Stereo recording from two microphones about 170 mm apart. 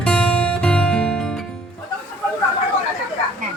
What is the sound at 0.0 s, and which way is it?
Music, 5° left (ahead or behind).